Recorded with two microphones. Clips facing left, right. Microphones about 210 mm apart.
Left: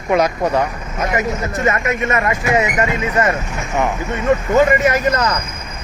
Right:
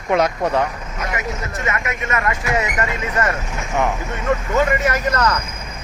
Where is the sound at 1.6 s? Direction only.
35° left (ahead or behind); by 3.3 s 15° left (ahead or behind).